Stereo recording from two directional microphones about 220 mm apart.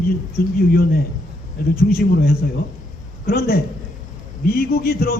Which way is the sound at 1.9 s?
45° left (ahead or behind).